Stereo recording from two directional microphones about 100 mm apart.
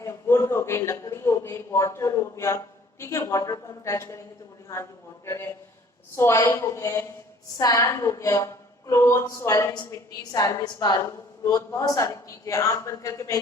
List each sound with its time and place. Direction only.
0.0 s a man's voice: 25° left (ahead or behind)